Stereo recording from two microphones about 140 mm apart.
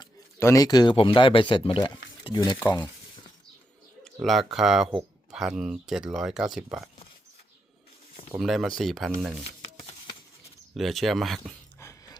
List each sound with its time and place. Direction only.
0.3 s speech: 20° left (ahead or behind)
2.6 s speech: 15° left (ahead or behind)
4.0 s speech: centre (ahead or behind)
8.4 s speech: centre (ahead or behind)
10.8 s speech: centre (ahead or behind)